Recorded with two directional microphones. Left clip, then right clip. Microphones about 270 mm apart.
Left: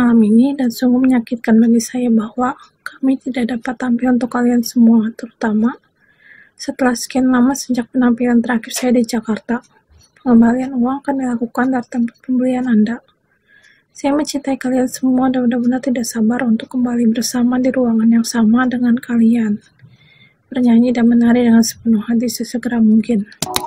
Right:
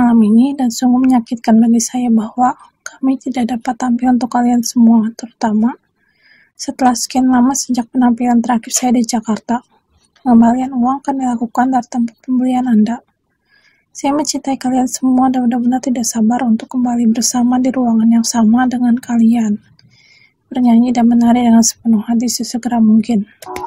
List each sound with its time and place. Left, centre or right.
0.0 s speech: right
14.4 s speech: right